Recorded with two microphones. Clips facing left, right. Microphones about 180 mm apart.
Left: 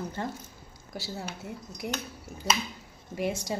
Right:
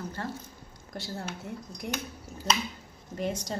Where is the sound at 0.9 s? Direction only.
5° left (ahead or behind).